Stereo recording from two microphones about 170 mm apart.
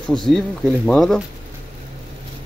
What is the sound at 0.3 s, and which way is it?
Speech, 5° left (ahead or behind).